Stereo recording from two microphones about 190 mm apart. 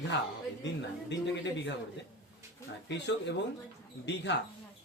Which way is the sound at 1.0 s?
70° left (ahead or behind).